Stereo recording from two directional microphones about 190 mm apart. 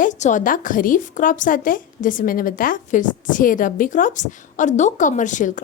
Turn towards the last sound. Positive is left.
turn(degrees=40)  # may be behind; listen again after turning